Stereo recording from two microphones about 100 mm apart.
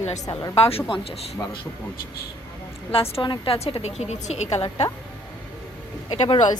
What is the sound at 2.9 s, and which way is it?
A woman's voice, 65° left (ahead or behind).